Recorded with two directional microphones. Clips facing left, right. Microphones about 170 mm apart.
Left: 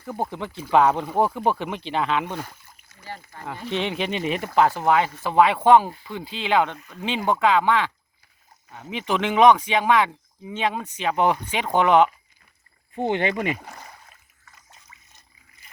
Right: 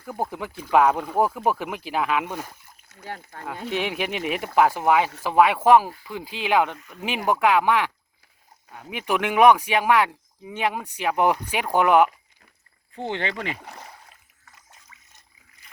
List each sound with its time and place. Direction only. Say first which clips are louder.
0.1 s speech: left 1 dB; 5° right (ahead or behind)
2.9 s speech: right 2 dB; 60° right (ahead or behind)
3.7 s speech: left 1 dB; 10° right (ahead or behind)
13.0 s speech: left 5 dB; 15° left (ahead or behind)